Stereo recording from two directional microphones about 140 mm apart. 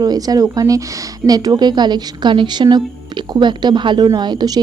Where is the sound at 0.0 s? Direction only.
25° right (ahead or behind).